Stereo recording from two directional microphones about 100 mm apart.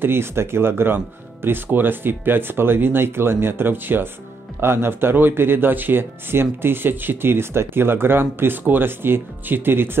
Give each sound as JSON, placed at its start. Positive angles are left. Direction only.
{"t": 0.0, "sound": "speech", "side_deg": -25}